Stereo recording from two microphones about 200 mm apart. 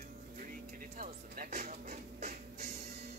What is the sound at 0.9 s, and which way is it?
Music, 45° right (ahead or behind).